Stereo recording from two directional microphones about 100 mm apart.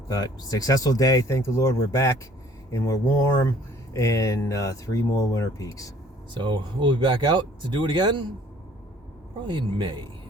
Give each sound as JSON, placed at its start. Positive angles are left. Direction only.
{"t": 0.1, "sound": "speech", "side_deg": 40}
{"t": 6.3, "sound": "speech", "side_deg": -55}
{"t": 9.5, "sound": "speech", "side_deg": -50}